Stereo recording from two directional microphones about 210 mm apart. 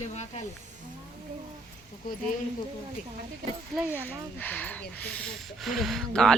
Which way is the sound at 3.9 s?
10° left (ahead or behind).